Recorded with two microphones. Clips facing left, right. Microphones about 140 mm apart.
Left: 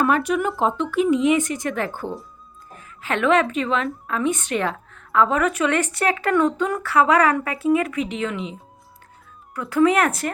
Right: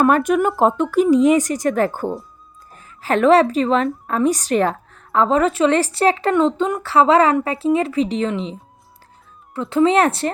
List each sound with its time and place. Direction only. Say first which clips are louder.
0.0 s a woman's voice: right 5 dB; 50° right (ahead or behind); by 8.5 s 30° right (ahead or behind)
9.6 s speech: right 3 dB; 25° right (ahead or behind)